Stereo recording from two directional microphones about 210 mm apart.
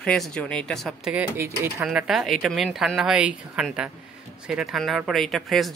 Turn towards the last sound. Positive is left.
turn(degrees=0)  # may be behind; listen again after turning